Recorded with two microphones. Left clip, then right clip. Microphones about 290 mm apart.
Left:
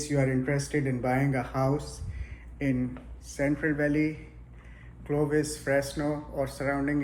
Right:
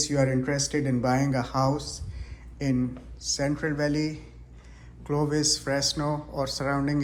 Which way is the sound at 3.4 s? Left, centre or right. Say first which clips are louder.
Left 2 dB; right.